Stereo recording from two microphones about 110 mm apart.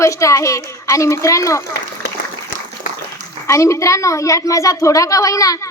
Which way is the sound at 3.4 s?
30° left (ahead or behind).